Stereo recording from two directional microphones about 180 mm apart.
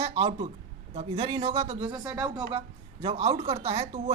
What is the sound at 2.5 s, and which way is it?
A woman's voice, 35° right (ahead or behind).